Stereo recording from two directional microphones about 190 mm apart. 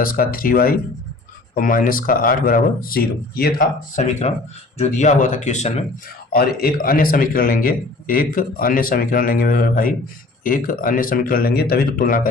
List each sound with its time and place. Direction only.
0.0 s a man's voice: 50° left (ahead or behind)
3.9 s speech: 35° left (ahead or behind)
6.3 s a man's voice: 50° left (ahead or behind)